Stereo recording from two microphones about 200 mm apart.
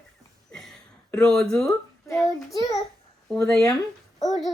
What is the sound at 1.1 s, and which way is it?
Speech, 5° left (ahead or behind).